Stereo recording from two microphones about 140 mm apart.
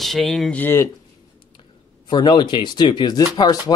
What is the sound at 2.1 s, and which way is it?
Speech, 35° left (ahead or behind).